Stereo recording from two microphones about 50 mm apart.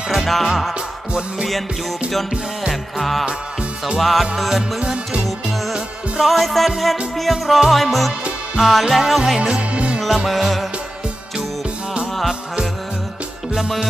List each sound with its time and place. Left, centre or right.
0.1 s music: centre
2.7 s music: centre
4.7 s music: centre
5.7 s music: centre
9.4 s music: right
9.9 s music: centre